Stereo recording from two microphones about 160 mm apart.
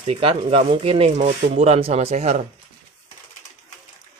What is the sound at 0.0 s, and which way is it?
Speech, 35° right (ahead or behind).